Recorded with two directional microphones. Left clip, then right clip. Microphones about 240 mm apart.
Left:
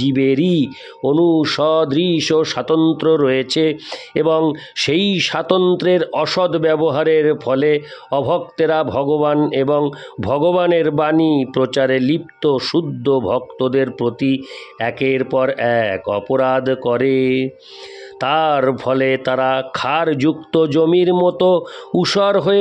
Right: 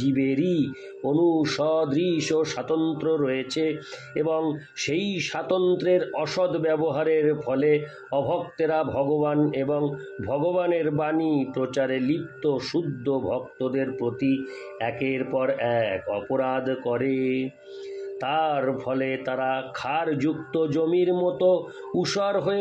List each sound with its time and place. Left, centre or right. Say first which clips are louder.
0.0 s speech: left 8 dB; left